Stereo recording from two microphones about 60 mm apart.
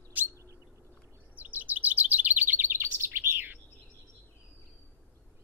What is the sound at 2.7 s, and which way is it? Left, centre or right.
Bird, right.